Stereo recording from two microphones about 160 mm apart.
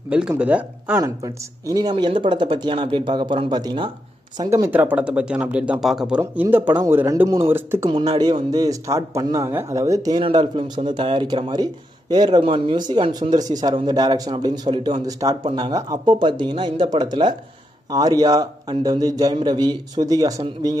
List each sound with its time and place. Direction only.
0.4 s speech: 10° right (ahead or behind)
1.0 s speech: 20° right (ahead or behind)
8.2 s speech: 25° right (ahead or behind)
10.2 s speech: 35° right (ahead or behind)